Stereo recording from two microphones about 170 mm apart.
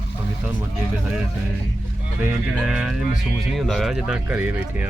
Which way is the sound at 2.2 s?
5° right (ahead or behind).